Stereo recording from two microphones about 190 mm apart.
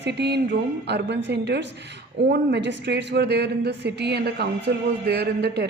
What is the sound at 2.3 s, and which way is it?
A woman's voice, 65° right (ahead or behind).